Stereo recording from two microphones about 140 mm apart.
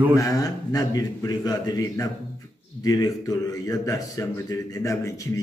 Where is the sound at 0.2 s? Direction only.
25° left (ahead or behind).